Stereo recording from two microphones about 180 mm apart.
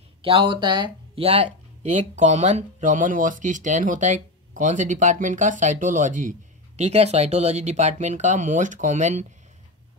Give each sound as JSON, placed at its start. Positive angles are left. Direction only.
{"t": 0.2, "sound": "speech", "side_deg": -30}